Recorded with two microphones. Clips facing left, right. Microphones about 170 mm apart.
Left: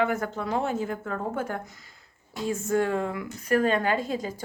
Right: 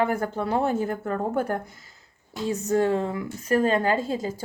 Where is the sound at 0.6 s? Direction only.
45° right (ahead or behind).